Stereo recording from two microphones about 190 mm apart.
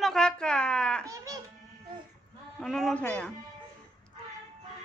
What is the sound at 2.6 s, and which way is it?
Speech, centre (ahead or behind).